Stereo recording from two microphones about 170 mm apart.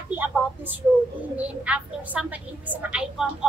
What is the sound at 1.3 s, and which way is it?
A woman's voice, 10° right (ahead or behind).